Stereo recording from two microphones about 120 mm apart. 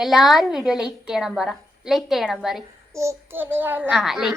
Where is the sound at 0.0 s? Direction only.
Centre (ahead or behind).